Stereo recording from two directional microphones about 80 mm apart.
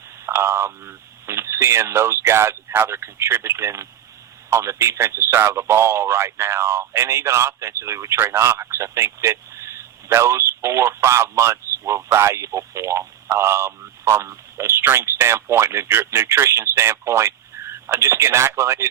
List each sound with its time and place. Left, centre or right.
0.3 s a man's voice: right